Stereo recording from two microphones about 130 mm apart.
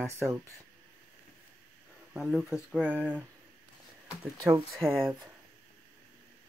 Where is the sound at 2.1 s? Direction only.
5° right (ahead or behind).